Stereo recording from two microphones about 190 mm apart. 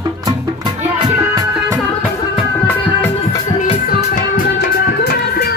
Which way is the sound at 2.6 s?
10° left (ahead or behind).